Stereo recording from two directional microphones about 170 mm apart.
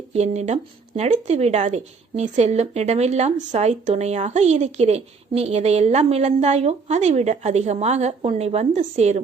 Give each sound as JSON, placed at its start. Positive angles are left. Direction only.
{"t": 0.1, "sound": "speech", "side_deg": -40}